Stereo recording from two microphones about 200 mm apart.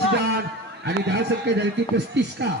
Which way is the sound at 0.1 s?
60° right (ahead or behind).